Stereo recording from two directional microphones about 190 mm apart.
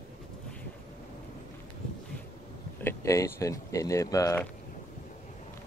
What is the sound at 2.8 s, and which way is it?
Speech, 15° left (ahead or behind).